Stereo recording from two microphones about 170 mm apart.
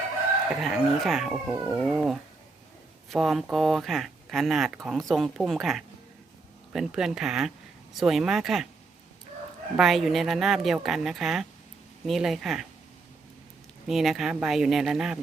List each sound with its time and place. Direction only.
0.6 s speech: centre (ahead or behind)
1.5 s speech: 10° right (ahead or behind)
1.8 s speech: centre (ahead or behind)
9.7 s speech: centre (ahead or behind)
13.8 s speech: centre (ahead or behind)